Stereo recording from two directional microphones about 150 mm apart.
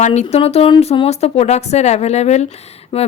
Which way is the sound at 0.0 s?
50° left (ahead or behind).